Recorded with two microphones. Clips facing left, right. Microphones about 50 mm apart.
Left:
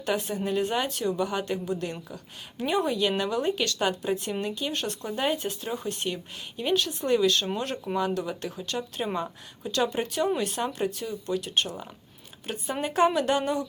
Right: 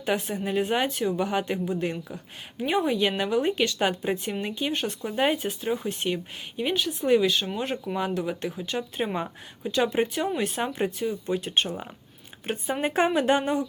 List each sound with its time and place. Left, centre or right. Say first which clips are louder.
0.0 s a woman's voice: right 1 dB; centre
4.2 s a woman's voice: right 1 dB; centre